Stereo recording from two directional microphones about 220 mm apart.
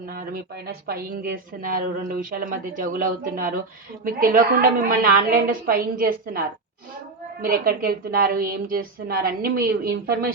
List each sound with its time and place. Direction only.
0.1 s a woman's voice: 40° right (ahead or behind)
7.4 s a woman's voice: 40° right (ahead or behind)